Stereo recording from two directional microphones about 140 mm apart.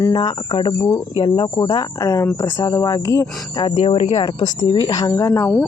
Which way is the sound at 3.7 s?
45° left (ahead or behind).